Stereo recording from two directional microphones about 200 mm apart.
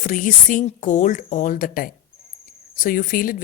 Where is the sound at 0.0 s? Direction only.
40° left (ahead or behind).